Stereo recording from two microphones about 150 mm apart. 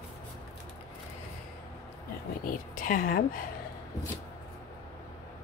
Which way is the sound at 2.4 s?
65° left (ahead or behind).